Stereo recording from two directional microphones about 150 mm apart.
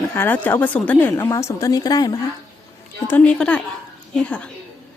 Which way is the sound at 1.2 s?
20° left (ahead or behind).